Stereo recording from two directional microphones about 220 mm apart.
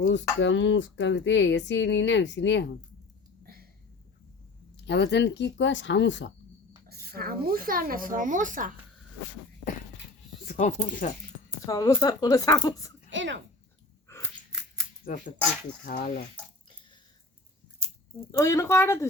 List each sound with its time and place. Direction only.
0.0 s speech: 55° left (ahead or behind)
3.4 s a sound: 45° right (ahead or behind)
4.9 s speech: 50° left (ahead or behind)
6.8 s speech: 45° right (ahead or behind)
10.4 s speech: 35° left (ahead or behind)
11.6 s speech: 15° left (ahead or behind)
13.1 s a sound: 55° right (ahead or behind)
14.1 s chewing: 10° left (ahead or behind)
15.0 s speech: 40° left (ahead or behind)
18.3 s speech: 15° left (ahead or behind)